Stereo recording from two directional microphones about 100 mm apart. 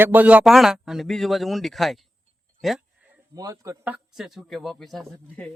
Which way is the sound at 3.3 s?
35° right (ahead or behind).